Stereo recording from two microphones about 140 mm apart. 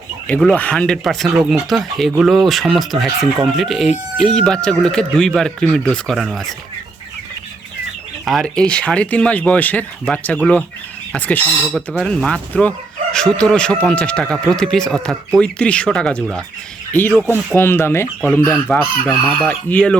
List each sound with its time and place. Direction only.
0.3 s speech: 5° left (ahead or behind)
8.2 s speech: centre (ahead or behind)